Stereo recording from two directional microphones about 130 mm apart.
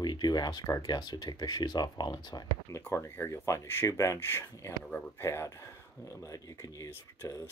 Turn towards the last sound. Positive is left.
turn(degrees=20)  # may be behind; listen again after turning